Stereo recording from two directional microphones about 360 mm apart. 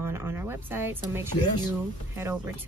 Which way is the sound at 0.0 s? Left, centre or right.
Centre.